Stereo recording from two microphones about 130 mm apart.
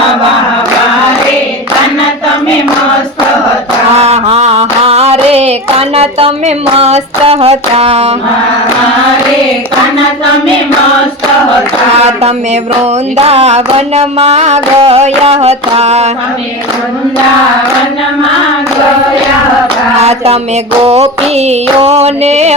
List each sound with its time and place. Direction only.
3.9 s music: 55° right (ahead or behind)
13.2 s music: 50° right (ahead or behind)
20.0 s music: 55° right (ahead or behind)